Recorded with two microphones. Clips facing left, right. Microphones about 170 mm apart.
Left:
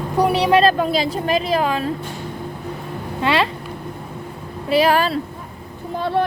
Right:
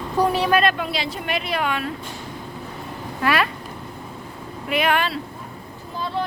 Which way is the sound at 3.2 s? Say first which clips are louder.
Left 2 dB; 25° left (ahead or behind).